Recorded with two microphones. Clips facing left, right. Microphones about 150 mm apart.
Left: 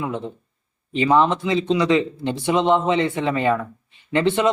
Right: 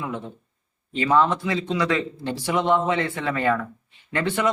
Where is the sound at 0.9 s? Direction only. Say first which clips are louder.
Left 3 dB; 20° left (ahead or behind).